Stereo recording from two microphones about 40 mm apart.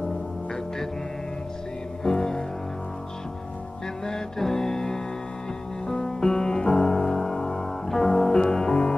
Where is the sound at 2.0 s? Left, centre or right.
Centre.